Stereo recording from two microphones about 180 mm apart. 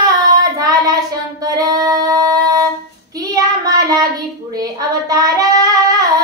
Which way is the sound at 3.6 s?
20° right (ahead or behind).